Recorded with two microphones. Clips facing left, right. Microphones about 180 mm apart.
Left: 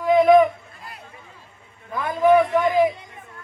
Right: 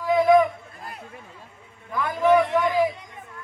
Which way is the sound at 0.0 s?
20° left (ahead or behind).